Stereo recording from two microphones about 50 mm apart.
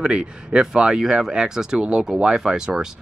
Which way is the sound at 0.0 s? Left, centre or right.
Centre.